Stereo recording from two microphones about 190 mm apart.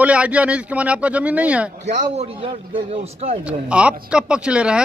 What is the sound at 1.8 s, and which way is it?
A man's voice, 35° right (ahead or behind).